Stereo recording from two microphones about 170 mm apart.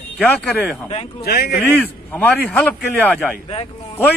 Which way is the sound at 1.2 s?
65° left (ahead or behind).